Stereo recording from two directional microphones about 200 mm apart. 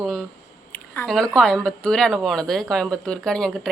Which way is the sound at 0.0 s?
Centre (ahead or behind).